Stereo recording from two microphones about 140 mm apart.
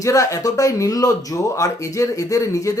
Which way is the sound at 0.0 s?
20° left (ahead or behind).